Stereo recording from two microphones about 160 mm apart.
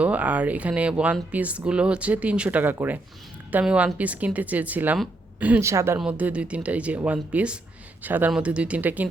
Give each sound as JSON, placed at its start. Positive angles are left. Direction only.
{"t": 0.0, "sound": "speech", "side_deg": -10}